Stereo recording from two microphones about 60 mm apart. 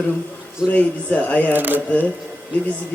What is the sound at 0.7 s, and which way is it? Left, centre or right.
Speech, left.